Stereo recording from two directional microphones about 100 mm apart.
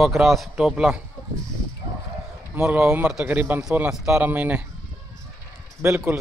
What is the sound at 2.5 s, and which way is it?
Speech, 15° right (ahead or behind).